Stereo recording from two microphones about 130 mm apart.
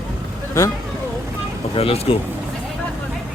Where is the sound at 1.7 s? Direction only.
50° left (ahead or behind).